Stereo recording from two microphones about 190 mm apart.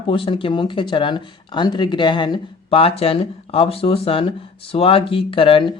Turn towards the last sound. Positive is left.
turn(degrees=25)  # may be behind; listen again after turning